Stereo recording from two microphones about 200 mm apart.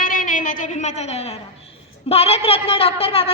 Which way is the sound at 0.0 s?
40° left (ahead or behind).